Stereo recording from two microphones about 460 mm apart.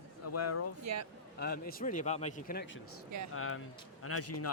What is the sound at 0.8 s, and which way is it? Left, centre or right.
Speech, right.